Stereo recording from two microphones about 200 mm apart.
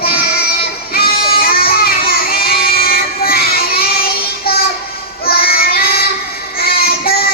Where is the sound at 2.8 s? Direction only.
50° left (ahead or behind).